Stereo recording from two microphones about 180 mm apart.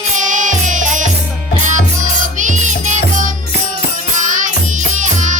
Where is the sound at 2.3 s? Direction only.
45° right (ahead or behind).